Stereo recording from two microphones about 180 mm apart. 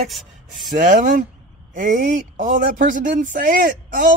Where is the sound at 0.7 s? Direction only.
45° right (ahead or behind).